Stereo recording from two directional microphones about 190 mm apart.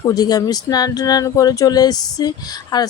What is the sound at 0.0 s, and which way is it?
Speech, 20° left (ahead or behind).